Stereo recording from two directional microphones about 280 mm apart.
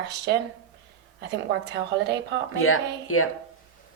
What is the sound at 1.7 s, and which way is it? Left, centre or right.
Speech, right.